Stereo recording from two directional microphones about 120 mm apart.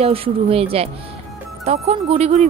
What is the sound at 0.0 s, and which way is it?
A woman's voice, 55° right (ahead or behind).